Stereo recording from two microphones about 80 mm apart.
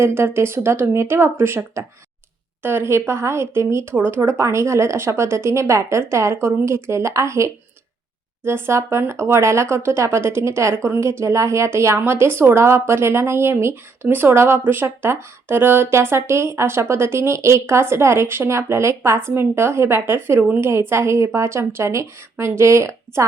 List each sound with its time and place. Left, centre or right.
0.0 s speech: right